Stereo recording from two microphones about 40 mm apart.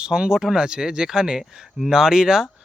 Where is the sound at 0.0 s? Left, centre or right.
Centre.